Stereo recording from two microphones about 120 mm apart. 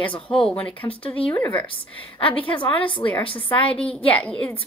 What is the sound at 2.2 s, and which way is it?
Speech, 45° left (ahead or behind).